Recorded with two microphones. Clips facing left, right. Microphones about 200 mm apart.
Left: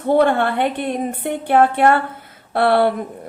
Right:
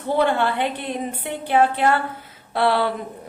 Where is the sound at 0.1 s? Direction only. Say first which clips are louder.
Left 5 dB; 55° left (ahead or behind).